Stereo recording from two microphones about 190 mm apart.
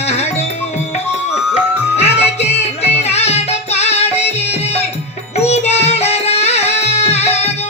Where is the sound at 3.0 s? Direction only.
35° left (ahead or behind).